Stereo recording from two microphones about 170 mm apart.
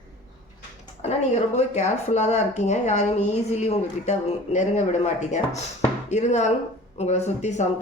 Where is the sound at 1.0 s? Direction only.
40° left (ahead or behind).